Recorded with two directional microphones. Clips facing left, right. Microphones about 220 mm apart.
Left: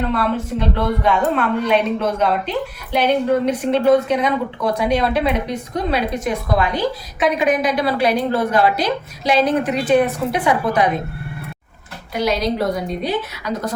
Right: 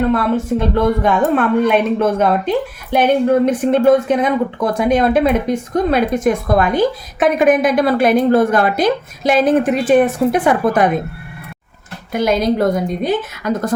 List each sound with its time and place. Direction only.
0.1 s a woman's voice: 50° right (ahead or behind)
12.1 s a woman's voice: 50° right (ahead or behind)